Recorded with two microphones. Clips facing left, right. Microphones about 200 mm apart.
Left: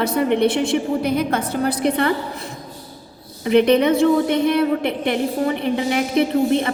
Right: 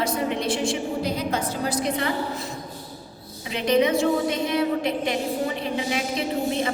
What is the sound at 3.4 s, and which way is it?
A woman's voice, 60° left (ahead or behind).